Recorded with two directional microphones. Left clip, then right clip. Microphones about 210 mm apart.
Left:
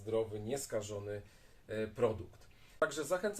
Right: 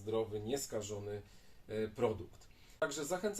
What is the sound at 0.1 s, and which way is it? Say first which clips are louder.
Mantra: left 1 dB; 15° left (ahead or behind).